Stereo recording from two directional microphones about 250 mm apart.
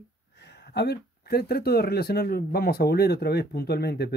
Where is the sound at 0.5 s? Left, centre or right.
Left.